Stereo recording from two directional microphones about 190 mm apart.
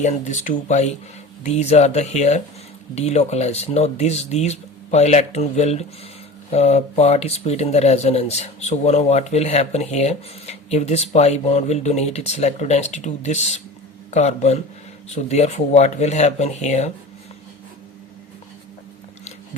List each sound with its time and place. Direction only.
0.0 s speech: 40° left (ahead or behind)